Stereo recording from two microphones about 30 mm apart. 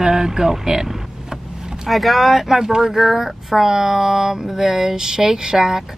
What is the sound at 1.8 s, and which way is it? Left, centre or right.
Speech, centre.